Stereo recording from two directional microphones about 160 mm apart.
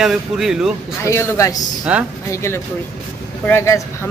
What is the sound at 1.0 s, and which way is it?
Speech, 15° left (ahead or behind).